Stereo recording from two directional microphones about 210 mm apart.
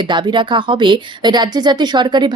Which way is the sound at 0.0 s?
20° right (ahead or behind).